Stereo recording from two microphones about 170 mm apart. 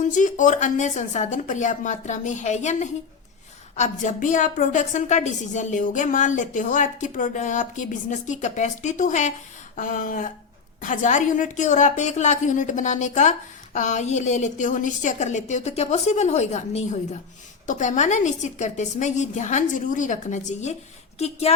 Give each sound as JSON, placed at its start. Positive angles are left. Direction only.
{"t": 0.0, "sound": "a woman's voice", "side_deg": 45}